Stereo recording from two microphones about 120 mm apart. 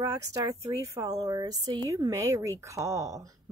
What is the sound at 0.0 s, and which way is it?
A woman's voice, 30° right (ahead or behind).